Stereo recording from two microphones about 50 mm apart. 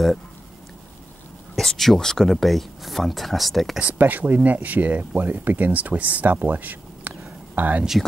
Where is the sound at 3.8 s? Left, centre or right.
Right.